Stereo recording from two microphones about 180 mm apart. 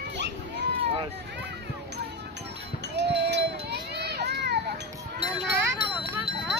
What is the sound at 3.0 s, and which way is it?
Chink, 70° right (ahead or behind).